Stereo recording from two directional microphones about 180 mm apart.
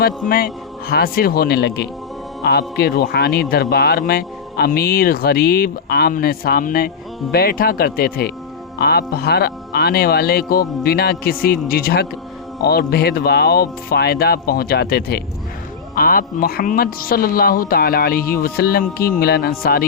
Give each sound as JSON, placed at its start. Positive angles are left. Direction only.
{"t": 0.3, "sound": "speech", "side_deg": 55}